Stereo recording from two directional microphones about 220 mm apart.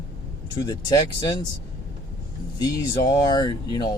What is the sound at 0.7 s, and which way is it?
Speech, 15° left (ahead or behind).